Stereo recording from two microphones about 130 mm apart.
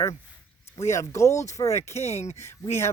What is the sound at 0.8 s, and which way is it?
Speech, 25° left (ahead or behind).